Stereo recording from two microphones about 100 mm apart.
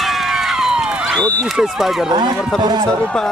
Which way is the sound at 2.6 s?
45° right (ahead or behind).